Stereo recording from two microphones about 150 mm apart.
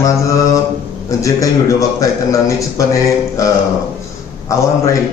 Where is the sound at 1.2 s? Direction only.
20° left (ahead or behind).